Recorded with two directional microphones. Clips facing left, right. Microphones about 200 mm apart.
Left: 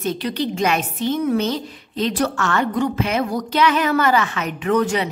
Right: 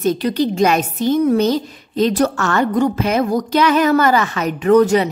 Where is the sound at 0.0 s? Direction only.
40° right (ahead or behind).